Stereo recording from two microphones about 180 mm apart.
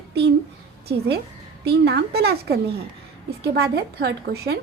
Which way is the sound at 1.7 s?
65° right (ahead or behind).